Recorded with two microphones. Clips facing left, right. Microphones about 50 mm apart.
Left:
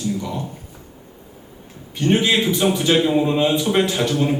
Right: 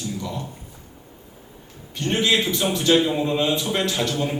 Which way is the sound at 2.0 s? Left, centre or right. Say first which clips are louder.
Left 4 dB; centre.